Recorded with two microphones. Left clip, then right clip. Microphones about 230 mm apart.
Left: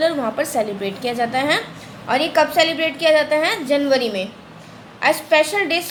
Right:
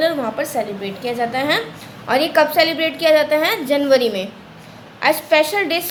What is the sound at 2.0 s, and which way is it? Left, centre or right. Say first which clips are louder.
A woman's voice: right 2 dB; centre.